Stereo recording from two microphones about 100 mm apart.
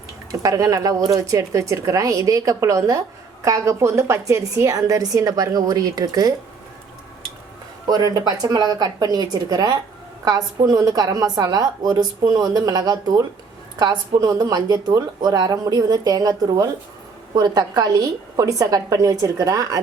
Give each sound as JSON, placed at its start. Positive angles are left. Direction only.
{"t": 0.3, "sound": "a woman's voice", "side_deg": -35}
{"t": 7.9, "sound": "a woman's voice", "side_deg": -40}